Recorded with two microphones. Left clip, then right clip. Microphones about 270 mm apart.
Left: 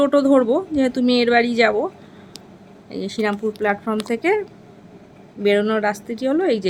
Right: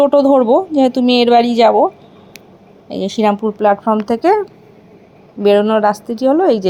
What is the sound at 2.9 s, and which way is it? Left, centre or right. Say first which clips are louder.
A woman's voice: right 8 dB; centre.